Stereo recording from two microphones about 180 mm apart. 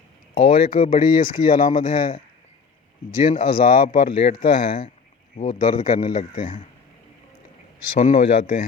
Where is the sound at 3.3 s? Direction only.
50° left (ahead or behind).